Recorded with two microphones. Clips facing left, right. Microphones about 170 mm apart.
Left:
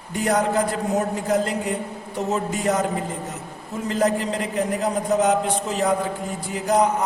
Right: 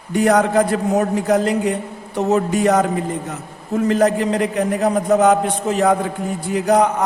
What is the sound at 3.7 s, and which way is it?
A man's voice, 65° right (ahead or behind).